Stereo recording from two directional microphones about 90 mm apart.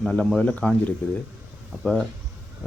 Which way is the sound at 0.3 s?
15° left (ahead or behind).